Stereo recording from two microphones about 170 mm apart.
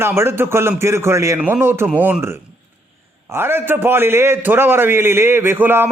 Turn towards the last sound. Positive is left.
turn(degrees=-10)  # may be behind; listen again after turning